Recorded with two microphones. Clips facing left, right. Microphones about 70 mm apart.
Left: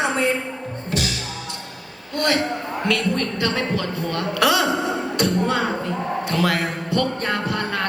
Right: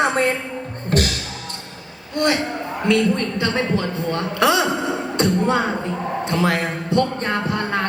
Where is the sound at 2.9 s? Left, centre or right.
Right.